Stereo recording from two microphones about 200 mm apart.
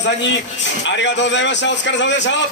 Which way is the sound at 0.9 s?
65° left (ahead or behind).